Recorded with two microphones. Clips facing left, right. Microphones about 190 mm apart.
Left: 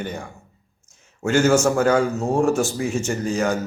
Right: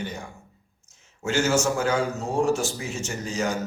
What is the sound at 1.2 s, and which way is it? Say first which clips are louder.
A man's voice: left 6 dB; 55° left (ahead or behind).